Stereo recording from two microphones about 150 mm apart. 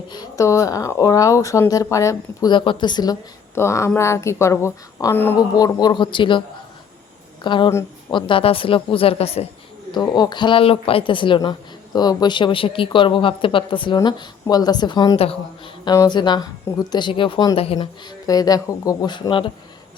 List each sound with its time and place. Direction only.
0.1 s speech: 25° left (ahead or behind)
5.4 s speech: 25° left (ahead or behind)
7.4 s speech: 30° left (ahead or behind)
9.9 s speech: 25° left (ahead or behind)
18.3 s speech: 25° left (ahead or behind)